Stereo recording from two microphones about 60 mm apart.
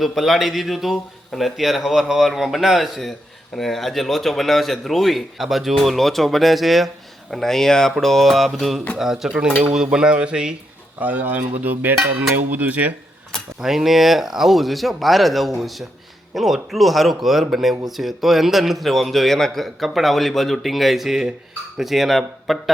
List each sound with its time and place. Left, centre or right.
0.0 s a man's voice: centre
9.0 s cutlery: centre
11.0 s speech: right
13.6 s a man's voice: centre